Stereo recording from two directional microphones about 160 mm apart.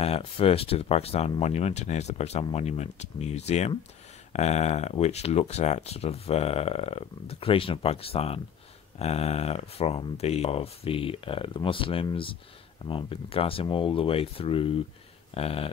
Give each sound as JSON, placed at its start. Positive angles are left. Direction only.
{"t": 0.0, "sound": "speech", "side_deg": 40}